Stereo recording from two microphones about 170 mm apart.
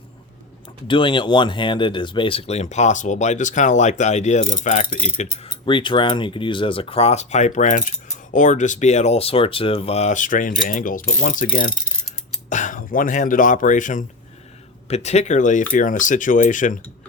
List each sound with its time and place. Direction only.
0.9 s speech: 30° left (ahead or behind); by 11.4 s 55° left (ahead or behind)
12.5 s speech: 50° left (ahead or behind)